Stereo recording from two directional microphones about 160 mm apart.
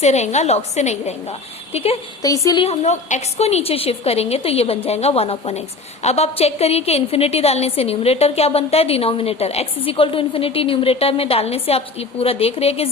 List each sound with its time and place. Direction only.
0.0 s a woman's voice: 45° left (ahead or behind)
2.2 s a woman's voice: 20° left (ahead or behind)
2.6 s a woman's voice: 45° left (ahead or behind)